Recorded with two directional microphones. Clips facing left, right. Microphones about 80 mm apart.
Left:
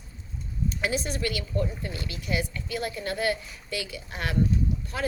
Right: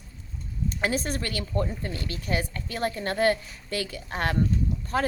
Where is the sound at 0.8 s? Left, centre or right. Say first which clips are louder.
Right 1 dB; right.